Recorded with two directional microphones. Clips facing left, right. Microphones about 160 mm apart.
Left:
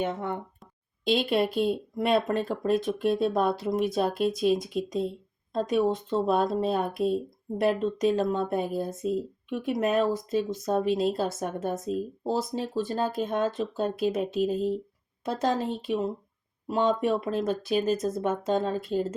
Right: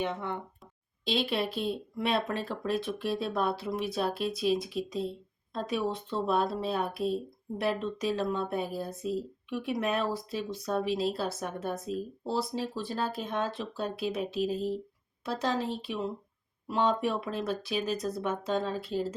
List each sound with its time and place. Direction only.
0.0 s speech: 50° left (ahead or behind)
17.4 s speech: 45° left (ahead or behind)